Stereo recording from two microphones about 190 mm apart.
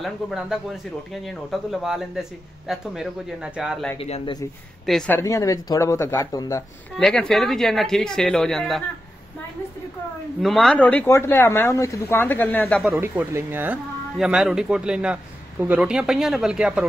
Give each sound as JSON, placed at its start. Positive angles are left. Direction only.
{"t": 0.0, "sound": "speech", "side_deg": 0}
{"t": 4.0, "sound": "speech", "side_deg": 30}
{"t": 4.8, "sound": "speech", "side_deg": 5}
{"t": 5.2, "sound": "speech", "side_deg": 15}
{"t": 7.0, "sound": "speech", "side_deg": 5}
{"t": 10.4, "sound": "speech", "side_deg": 0}
{"t": 13.0, "sound": "speech", "side_deg": -10}